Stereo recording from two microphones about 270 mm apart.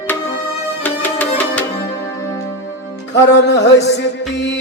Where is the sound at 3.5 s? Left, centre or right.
Left.